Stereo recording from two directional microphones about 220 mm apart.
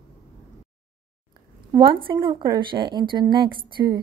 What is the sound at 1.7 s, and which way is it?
A woman's voice, 25° right (ahead or behind).